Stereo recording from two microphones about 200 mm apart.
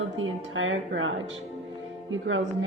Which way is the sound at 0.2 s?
75° right (ahead or behind).